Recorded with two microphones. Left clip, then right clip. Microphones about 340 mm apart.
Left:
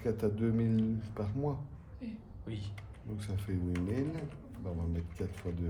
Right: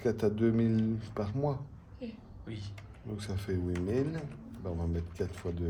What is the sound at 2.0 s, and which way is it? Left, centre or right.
Speech, centre.